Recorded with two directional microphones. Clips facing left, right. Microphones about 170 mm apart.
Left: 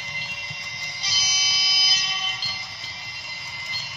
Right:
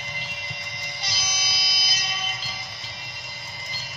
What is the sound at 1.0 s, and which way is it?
Music, 55° right (ahead or behind).